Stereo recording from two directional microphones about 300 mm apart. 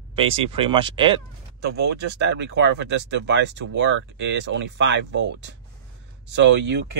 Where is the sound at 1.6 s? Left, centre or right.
Right.